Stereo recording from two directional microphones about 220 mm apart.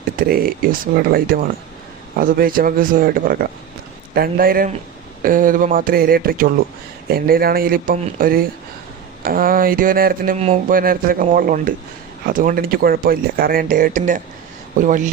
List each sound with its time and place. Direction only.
0.0 s speech: 45° right (ahead or behind)
10.3 s speech: 30° right (ahead or behind)